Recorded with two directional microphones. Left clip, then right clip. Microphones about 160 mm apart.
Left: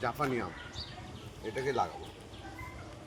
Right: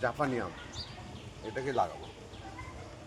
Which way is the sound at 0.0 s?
15° right (ahead or behind).